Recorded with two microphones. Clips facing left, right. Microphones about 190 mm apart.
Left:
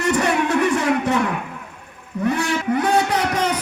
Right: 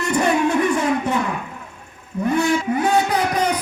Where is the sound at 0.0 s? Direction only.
75° left (ahead or behind).